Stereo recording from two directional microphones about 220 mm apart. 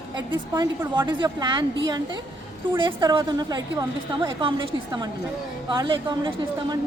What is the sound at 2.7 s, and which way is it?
A woman's voice, 20° right (ahead or behind).